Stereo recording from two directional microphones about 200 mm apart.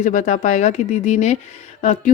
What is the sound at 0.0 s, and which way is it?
Speech, 40° left (ahead or behind).